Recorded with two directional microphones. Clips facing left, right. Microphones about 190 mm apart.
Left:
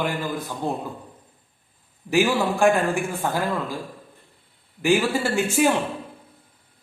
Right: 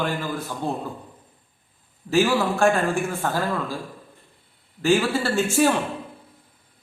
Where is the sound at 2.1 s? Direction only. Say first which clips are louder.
Even; 15° left (ahead or behind).